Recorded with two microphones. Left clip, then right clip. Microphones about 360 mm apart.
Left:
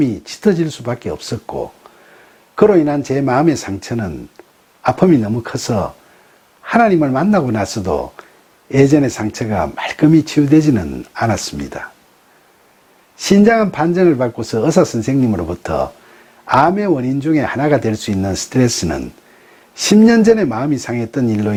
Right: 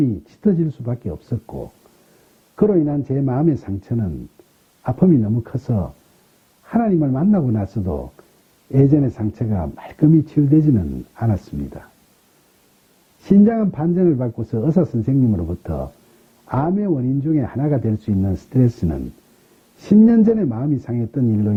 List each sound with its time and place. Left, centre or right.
0.0 s speech: centre
1.5 s speech: centre
13.2 s speech: centre